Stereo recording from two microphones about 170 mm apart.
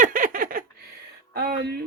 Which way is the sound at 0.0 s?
50° right (ahead or behind).